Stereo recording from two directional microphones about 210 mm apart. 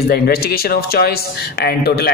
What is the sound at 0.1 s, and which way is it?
Speech, 45° left (ahead or behind).